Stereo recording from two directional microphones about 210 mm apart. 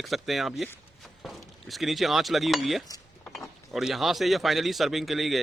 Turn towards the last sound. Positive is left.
turn(degrees=0)  # may be behind; listen again after turning